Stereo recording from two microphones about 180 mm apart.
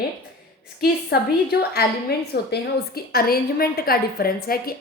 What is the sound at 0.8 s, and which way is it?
A woman's voice, 65° left (ahead or behind).